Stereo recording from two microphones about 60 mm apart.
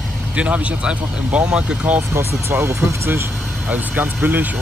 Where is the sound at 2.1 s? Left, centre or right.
Right.